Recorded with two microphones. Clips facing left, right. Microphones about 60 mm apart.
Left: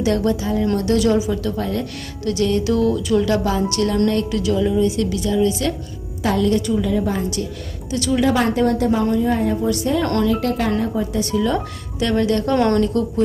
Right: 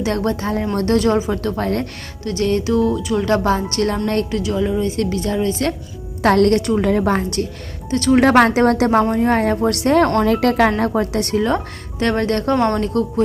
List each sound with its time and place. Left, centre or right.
0.0 s speech: right
4.9 s speech: right
6.2 s a woman's voice: right
7.9 s speech: right
8.2 s a woman's voice: right
9.2 s a woman's voice: right
10.2 s a woman's voice: right
10.8 s a woman's voice: right
11.3 s speech: right
12.5 s a woman's voice: centre
12.8 s speech: right